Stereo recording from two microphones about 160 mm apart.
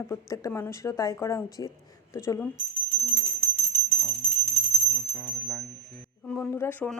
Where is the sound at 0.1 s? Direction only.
20° left (ahead or behind).